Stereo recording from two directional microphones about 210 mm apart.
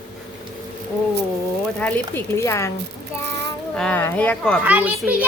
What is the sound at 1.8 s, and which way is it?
Speech, 10° left (ahead or behind).